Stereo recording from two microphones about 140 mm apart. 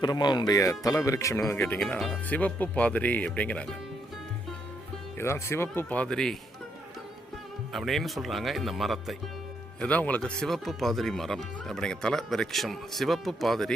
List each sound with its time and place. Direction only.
0.0 s speech: 30° left (ahead or behind); by 3.8 s 10° left (ahead or behind)
5.1 s speech: 20° left (ahead or behind)
7.7 s speech: centre (ahead or behind)
9.8 s speech: 10° left (ahead or behind)